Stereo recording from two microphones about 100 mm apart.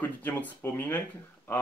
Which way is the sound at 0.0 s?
15° left (ahead or behind).